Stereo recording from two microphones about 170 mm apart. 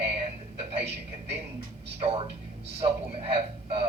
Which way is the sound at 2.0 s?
35° right (ahead or behind).